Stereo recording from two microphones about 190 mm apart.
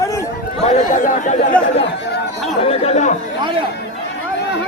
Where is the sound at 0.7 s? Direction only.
40° left (ahead or behind).